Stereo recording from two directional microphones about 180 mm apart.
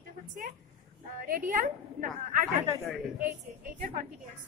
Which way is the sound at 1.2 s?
50° right (ahead or behind).